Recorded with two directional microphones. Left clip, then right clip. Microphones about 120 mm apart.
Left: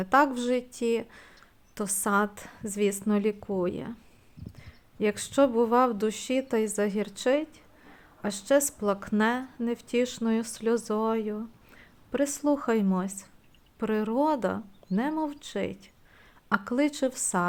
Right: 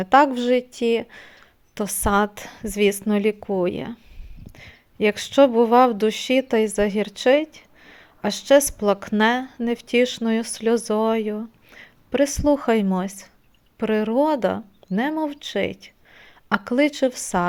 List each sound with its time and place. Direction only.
0.0 s a woman's voice: 30° right (ahead or behind)